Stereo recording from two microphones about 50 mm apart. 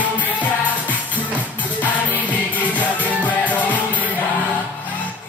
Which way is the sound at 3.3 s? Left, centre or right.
Left.